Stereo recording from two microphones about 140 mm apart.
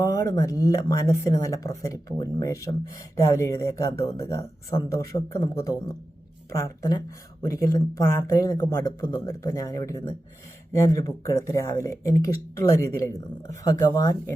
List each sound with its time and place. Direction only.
0.0 s speech: 25° left (ahead or behind)